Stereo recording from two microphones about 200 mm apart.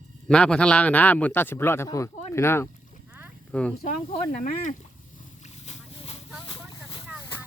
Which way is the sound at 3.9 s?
40° left (ahead or behind).